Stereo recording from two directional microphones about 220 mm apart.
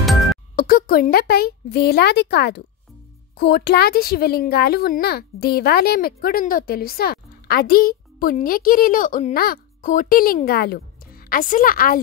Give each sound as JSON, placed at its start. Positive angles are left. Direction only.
{"t": 0.6, "sound": "a woman's voice", "side_deg": 40}